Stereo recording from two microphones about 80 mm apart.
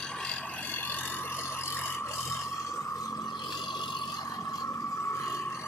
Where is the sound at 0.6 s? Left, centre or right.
Left.